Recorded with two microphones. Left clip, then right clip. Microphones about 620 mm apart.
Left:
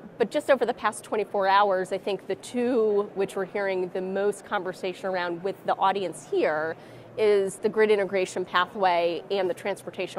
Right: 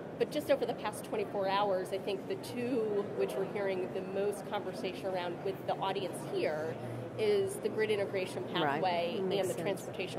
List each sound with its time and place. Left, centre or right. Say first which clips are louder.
0.2 s a woman's voice: left 9 dB; left